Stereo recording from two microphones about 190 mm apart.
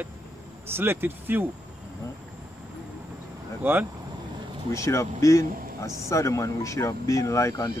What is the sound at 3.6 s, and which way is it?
Speech, 10° right (ahead or behind).